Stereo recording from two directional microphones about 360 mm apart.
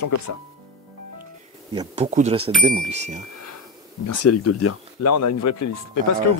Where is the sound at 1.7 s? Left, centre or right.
Centre.